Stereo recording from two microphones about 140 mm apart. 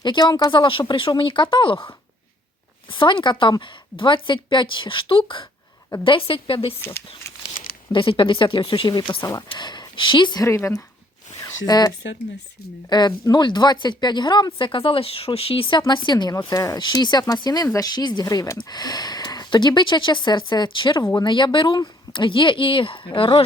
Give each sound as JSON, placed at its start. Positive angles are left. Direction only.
{"t": 0.0, "sound": "a woman's voice", "side_deg": 30}
{"t": 2.9, "sound": "a woman's voice", "side_deg": 35}